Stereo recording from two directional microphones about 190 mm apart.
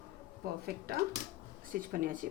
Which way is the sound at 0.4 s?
55° right (ahead or behind).